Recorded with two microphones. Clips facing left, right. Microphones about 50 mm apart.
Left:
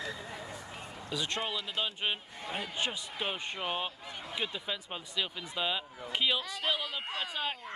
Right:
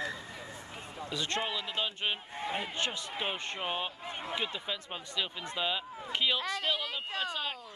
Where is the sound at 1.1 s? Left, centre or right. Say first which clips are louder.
Right 1 dB; centre.